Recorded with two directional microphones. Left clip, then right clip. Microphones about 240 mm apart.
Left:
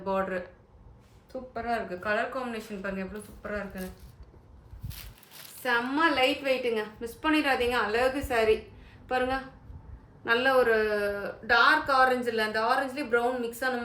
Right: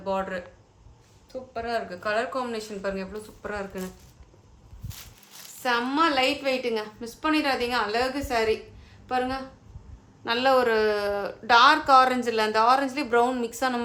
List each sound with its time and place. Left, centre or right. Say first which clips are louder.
0.0 s a woman's voice: right 1 dB; centre
5.6 s a woman's voice: right 2 dB; centre
10.2 s speech: right 2 dB; centre